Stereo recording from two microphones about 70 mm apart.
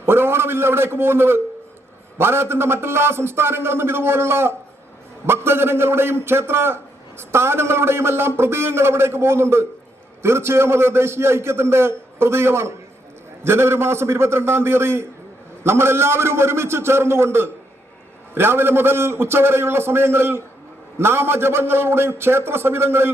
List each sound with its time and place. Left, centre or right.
0.0 s a man's voice: right